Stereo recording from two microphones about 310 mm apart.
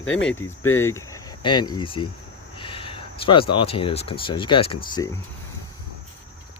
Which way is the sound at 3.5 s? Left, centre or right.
Centre.